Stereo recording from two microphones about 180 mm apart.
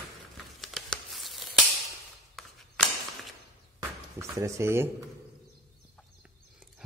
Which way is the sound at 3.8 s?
20° right (ahead or behind).